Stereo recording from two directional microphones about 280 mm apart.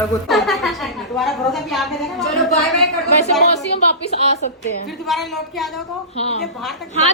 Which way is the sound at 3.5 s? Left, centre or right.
Left.